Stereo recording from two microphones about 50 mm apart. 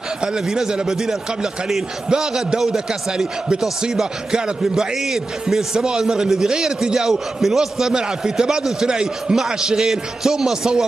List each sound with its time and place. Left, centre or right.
0.2 s a man's voice: centre